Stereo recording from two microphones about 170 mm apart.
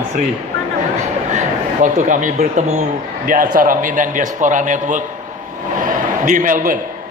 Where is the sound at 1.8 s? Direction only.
50° right (ahead or behind).